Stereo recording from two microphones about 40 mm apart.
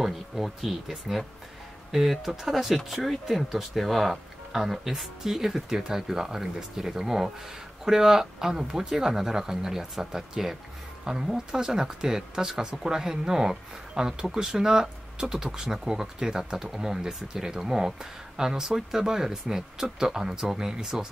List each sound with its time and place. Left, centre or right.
0.0 s speech: centre